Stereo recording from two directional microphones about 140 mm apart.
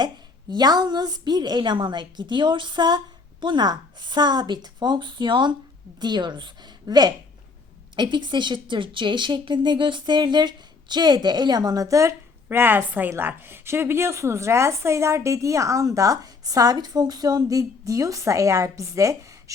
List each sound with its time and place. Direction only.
0.5 s a woman's voice: 30° right (ahead or behind)